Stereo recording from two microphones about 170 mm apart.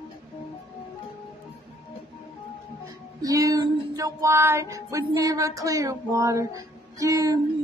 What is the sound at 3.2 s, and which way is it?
Music, 20° right (ahead or behind).